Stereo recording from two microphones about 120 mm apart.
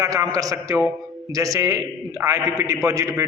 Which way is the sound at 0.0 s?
30° right (ahead or behind).